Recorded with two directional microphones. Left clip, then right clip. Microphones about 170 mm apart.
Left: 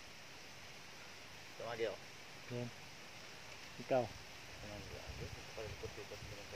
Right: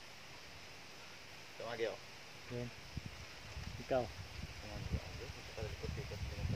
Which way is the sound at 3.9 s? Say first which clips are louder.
Left 1 dB; 30° left (ahead or behind).